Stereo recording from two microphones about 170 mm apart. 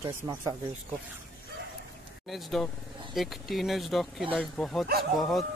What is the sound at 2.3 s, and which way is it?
Speech, centre (ahead or behind).